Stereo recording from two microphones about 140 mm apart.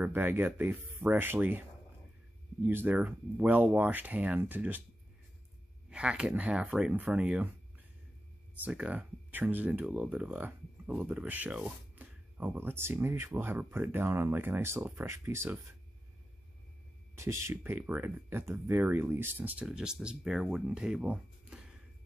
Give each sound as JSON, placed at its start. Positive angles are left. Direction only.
{"t": 0.0, "sound": "speech", "side_deg": -15}
{"t": 2.6, "sound": "speech", "side_deg": -15}
{"t": 5.9, "sound": "speech", "side_deg": -10}
{"t": 8.6, "sound": "speech", "side_deg": -10}
{"t": 17.1, "sound": "speech", "side_deg": -20}